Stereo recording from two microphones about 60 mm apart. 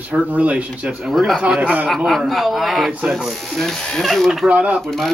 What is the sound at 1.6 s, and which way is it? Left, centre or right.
Speech, right.